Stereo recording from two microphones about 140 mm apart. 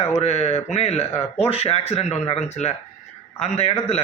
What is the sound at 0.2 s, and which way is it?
Speech, 50° left (ahead or behind).